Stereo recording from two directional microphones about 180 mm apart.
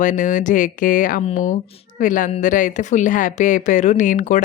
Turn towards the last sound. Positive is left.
turn(degrees=45)  # may be behind; listen again after turning